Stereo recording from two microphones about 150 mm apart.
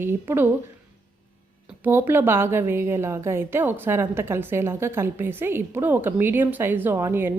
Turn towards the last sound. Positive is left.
turn(degrees=-15)  # may be behind; listen again after turning